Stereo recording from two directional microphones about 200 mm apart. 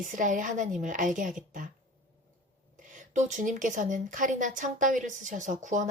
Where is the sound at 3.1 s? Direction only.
40° right (ahead or behind).